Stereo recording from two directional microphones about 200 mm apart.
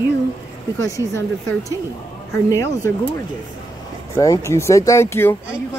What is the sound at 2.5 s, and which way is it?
Speech, 15° left (ahead or behind).